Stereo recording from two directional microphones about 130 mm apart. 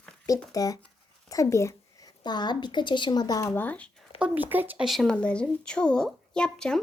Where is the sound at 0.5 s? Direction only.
25° left (ahead or behind).